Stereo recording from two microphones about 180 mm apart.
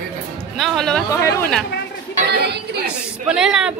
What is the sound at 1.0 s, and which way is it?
Speech, 15° left (ahead or behind).